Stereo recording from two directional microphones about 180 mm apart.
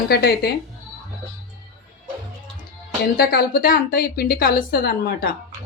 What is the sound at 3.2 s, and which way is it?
A woman's voice, 60° left (ahead or behind).